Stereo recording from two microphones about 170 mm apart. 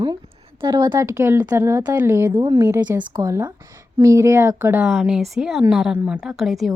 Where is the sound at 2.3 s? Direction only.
25° right (ahead or behind).